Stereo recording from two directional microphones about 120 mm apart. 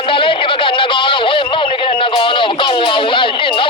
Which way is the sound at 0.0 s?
45° left (ahead or behind).